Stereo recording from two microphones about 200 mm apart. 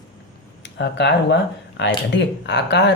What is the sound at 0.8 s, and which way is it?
Speech, 55° left (ahead or behind).